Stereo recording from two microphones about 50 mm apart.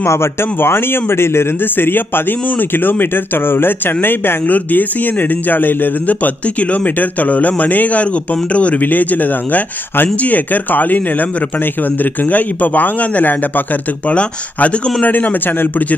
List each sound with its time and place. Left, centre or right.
0.0 s speech: left
4.5 s speech: left
14.1 s speech: left